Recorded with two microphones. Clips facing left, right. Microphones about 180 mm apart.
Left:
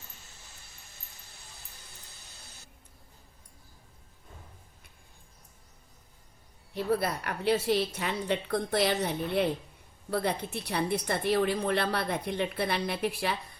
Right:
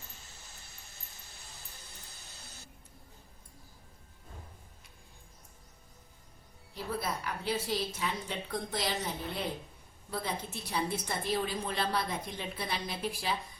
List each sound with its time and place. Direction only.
6.7 s a woman's voice: 65° left (ahead or behind)